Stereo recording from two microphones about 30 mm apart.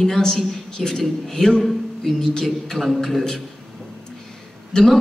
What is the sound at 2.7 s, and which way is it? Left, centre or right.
Speech, centre.